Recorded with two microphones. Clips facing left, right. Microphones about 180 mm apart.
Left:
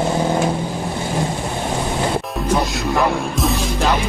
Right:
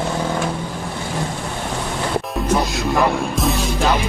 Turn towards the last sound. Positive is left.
turn(degrees=0)  # may be behind; listen again after turning